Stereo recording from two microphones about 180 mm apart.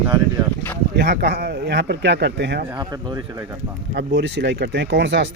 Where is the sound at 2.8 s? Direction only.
20° right (ahead or behind).